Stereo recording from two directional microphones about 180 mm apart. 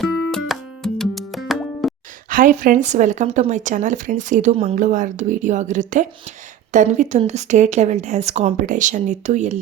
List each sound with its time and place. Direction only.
0.0 s music: centre (ahead or behind)
2.3 s speech: 45° right (ahead or behind)